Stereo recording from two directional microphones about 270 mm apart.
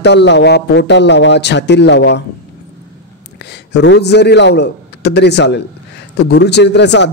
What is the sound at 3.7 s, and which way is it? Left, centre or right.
Speech, left.